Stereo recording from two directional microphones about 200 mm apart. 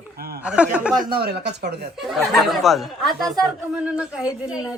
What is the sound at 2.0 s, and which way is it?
Speech, centre (ahead or behind).